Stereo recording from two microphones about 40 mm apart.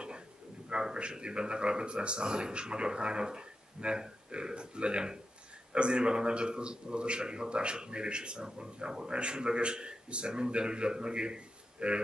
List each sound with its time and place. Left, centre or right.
0.7 s a man's voice: right